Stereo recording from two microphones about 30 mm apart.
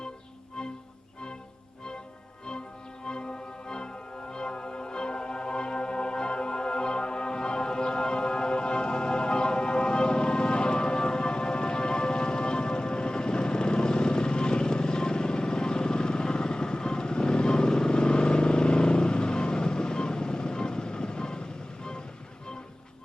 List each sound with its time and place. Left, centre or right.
3.1 s music: left